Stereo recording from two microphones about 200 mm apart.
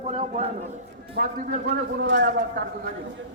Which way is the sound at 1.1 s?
45° right (ahead or behind).